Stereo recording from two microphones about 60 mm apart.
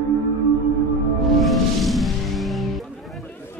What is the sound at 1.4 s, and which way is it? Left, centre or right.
Music, centre.